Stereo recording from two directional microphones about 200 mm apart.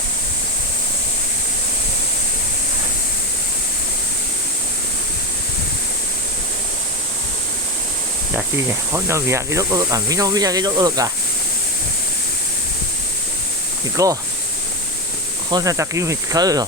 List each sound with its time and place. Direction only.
8.3 s speech: 10° right (ahead or behind)
13.9 s speech: 15° right (ahead or behind)
15.4 s speech: 20° right (ahead or behind)